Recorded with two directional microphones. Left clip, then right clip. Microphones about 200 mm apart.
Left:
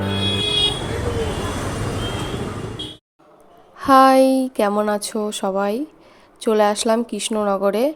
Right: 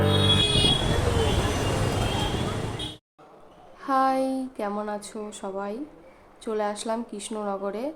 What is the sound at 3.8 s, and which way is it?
A woman's voice, 45° left (ahead or behind).